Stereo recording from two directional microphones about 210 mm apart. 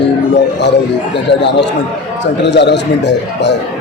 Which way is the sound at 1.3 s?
55° left (ahead or behind).